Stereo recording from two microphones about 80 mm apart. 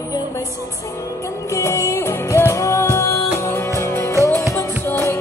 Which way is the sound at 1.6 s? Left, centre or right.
Left.